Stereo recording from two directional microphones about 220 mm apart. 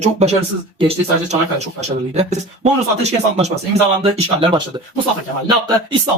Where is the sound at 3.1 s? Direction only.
30° right (ahead or behind).